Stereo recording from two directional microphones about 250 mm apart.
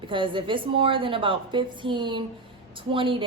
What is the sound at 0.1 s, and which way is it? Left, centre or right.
A woman's voice, centre.